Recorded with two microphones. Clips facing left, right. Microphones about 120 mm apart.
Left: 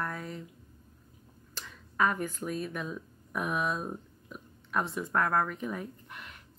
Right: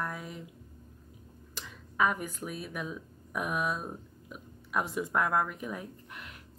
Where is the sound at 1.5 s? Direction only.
5° right (ahead or behind).